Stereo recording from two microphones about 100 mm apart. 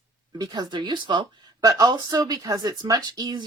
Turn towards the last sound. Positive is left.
turn(degrees=-45)  # may be behind; listen again after turning